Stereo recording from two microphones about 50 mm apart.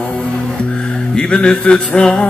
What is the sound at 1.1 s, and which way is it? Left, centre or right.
Music, left.